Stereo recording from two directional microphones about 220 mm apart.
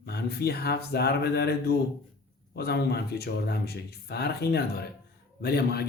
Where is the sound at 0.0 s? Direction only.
45° left (ahead or behind).